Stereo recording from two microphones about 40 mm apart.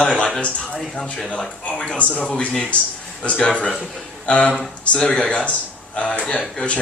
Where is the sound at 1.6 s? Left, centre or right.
Left.